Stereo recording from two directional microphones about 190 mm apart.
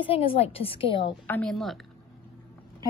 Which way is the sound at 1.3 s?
5° left (ahead or behind).